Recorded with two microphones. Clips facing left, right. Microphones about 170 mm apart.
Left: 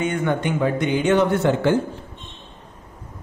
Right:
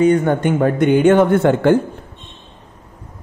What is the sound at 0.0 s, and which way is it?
A man's voice, 40° right (ahead or behind).